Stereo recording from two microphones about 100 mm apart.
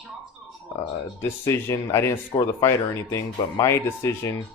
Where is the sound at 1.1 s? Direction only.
25° left (ahead or behind).